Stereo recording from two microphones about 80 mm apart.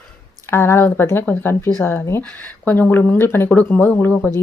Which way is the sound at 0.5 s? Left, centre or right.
Left.